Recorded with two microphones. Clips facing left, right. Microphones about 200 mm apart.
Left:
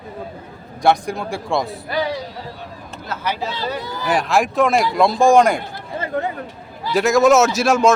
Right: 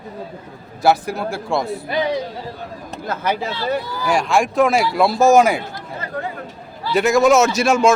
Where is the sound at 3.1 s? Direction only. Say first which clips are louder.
Right 2 dB; 50° right (ahead or behind).